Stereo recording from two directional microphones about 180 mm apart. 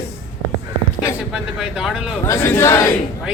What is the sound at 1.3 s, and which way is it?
Speech, 5° right (ahead or behind).